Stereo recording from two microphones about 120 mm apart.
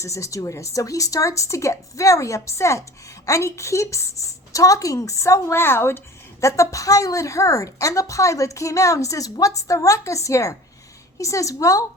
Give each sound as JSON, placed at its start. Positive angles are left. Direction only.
{"t": 0.0, "sound": "a woman's voice", "side_deg": 25}